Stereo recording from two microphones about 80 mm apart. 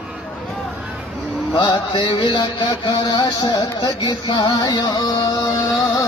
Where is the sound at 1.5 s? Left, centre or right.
Left.